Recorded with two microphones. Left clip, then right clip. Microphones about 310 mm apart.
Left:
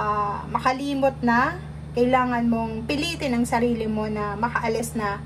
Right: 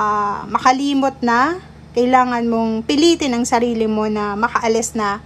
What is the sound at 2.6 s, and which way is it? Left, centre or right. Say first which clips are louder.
A woman's voice: right 11 dB; right.